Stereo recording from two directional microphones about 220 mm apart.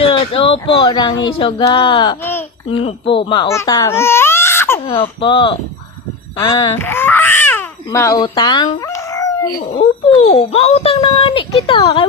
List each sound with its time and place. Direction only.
0.0 s a child's voice: 25° left (ahead or behind)
5.2 s a child's voice: 20° left (ahead or behind)
6.3 s babbling: 15° left (ahead or behind)
9.7 s a child's voice: 25° left (ahead or behind)